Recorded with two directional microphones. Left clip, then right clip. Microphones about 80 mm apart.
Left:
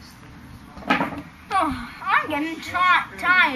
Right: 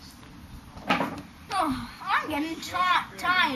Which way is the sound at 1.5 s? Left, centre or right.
Centre.